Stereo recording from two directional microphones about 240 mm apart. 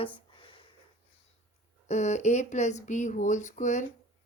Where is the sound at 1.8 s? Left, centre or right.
Left.